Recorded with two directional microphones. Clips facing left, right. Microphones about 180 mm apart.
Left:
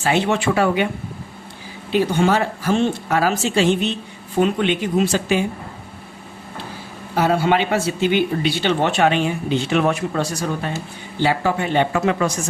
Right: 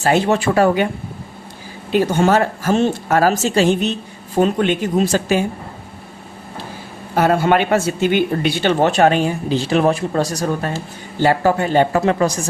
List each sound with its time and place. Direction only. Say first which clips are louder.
0.0 s speech: right 3 dB; 40° right (ahead or behind)
1.9 s speech: right 3 dB; 45° right (ahead or behind)
7.2 s speech: right 3 dB; 50° right (ahead or behind)